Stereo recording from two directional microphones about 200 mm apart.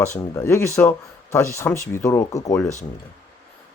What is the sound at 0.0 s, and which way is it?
Speech, 15° left (ahead or behind).